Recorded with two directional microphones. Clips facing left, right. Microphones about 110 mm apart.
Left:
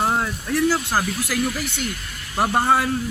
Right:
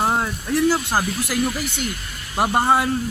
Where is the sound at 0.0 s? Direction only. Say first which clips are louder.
Right 1 dB; 20° right (ahead or behind).